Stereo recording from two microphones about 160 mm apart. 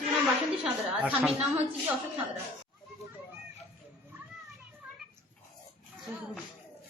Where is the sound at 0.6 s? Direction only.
10° right (ahead or behind).